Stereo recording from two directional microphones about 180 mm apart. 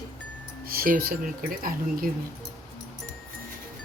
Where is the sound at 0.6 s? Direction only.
55° right (ahead or behind).